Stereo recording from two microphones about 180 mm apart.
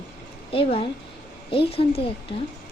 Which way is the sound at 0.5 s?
30° left (ahead or behind).